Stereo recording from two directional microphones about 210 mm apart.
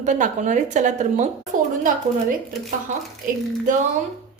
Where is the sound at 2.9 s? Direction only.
35° right (ahead or behind).